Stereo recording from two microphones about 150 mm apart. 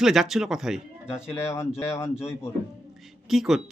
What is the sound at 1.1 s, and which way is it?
Speech, 15° left (ahead or behind).